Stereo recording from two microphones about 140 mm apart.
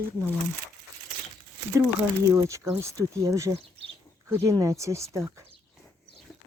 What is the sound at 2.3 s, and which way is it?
Speech, 20° right (ahead or behind).